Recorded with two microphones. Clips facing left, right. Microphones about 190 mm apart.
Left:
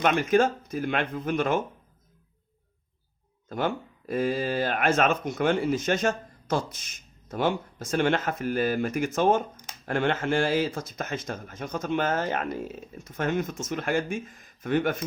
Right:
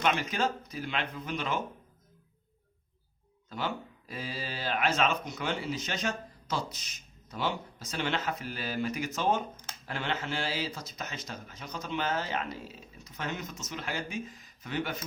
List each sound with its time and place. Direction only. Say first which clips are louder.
0.0 s speech: left 8 dB; 50° left (ahead or behind)
3.5 s speech: left 7 dB; 50° left (ahead or behind)